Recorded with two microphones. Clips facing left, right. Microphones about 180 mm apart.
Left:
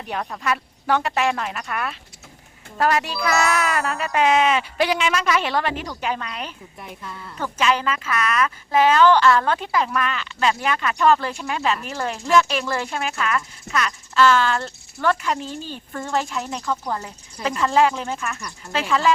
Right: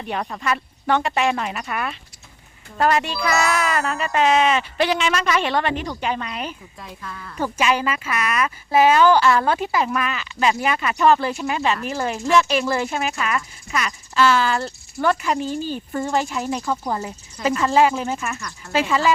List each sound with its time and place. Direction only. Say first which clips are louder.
0.0 s a child's voice: right 1 dB; centre (ahead or behind)
6.7 s speech: even; 20° left (ahead or behind)
7.3 s a child's voice: right 1 dB; 10° right (ahead or behind)